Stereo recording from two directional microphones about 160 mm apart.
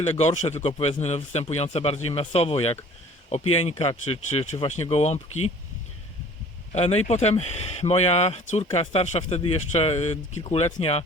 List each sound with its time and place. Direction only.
0.0 s speech: 45° left (ahead or behind)
6.7 s speech: 40° left (ahead or behind)